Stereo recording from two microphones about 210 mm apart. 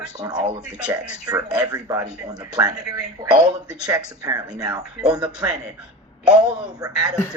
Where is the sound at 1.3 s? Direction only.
15° right (ahead or behind).